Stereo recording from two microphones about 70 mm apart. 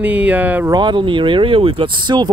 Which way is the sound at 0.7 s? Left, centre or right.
Right.